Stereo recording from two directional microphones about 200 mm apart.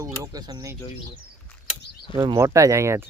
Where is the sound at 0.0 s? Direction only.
15° right (ahead or behind).